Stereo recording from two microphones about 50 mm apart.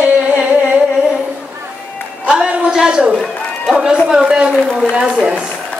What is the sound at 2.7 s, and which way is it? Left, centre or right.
A man's voice, centre.